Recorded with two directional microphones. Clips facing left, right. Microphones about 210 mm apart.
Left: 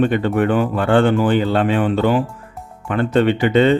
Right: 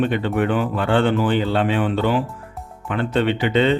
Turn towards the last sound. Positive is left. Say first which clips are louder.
# left 4 dB
turn(degrees=45)  # may be behind; listen again after turning